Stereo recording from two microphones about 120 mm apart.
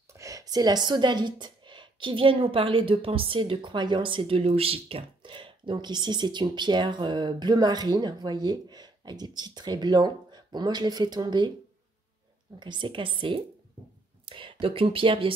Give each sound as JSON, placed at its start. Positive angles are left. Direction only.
{"t": 0.1, "sound": "speech", "side_deg": -25}
{"t": 12.5, "sound": "a woman's voice", "side_deg": -40}